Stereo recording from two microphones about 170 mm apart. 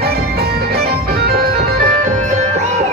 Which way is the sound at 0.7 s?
65° right (ahead or behind).